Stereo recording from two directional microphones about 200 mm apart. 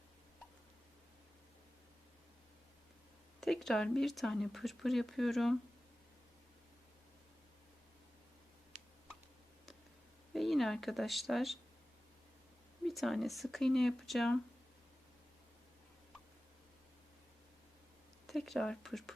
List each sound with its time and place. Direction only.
3.4 s speech: centre (ahead or behind)
8.7 s a sound: 35° right (ahead or behind)
10.3 s speech: centre (ahead or behind)
12.8 s speech: centre (ahead or behind)
18.3 s speech: centre (ahead or behind)